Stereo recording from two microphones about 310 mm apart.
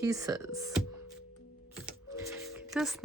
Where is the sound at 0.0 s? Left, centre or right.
Centre.